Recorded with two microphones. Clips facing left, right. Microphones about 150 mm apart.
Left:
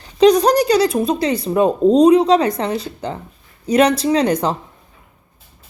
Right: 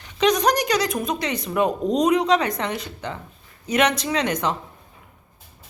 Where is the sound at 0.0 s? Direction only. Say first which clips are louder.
Left 8 dB; 35° left (ahead or behind).